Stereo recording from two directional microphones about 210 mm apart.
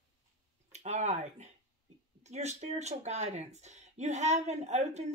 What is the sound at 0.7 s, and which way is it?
Speech, 35° right (ahead or behind).